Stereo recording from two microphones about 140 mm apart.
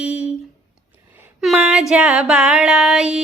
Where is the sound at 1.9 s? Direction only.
5° right (ahead or behind).